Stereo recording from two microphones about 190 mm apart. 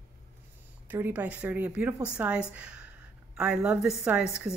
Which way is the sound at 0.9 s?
10° right (ahead or behind).